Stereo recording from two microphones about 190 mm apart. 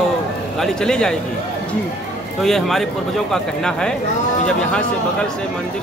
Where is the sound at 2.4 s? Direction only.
Centre (ahead or behind).